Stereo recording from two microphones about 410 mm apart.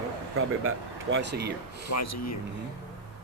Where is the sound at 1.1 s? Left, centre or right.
Right.